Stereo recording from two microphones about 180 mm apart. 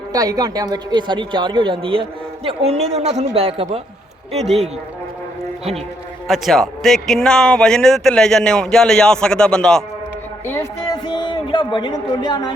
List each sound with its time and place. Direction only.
0.1 s speech: 20° right (ahead or behind); by 3.8 s 35° right (ahead or behind)
6.2 s a man's voice: centre (ahead or behind)
10.4 s a sound: 15° left (ahead or behind)